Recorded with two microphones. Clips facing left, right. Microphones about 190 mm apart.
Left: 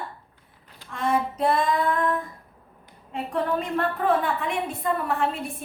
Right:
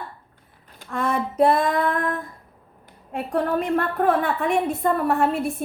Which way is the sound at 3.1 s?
55° right (ahead or behind).